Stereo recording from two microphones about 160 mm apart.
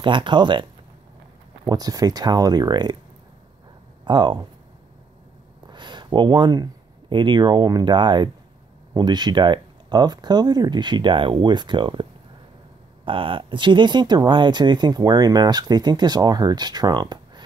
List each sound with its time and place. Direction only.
0.0 s speech: 30° right (ahead or behind)
1.7 s speech: 25° right (ahead or behind)
4.0 s speech: 30° right (ahead or behind)
5.7 s speech: 30° right (ahead or behind)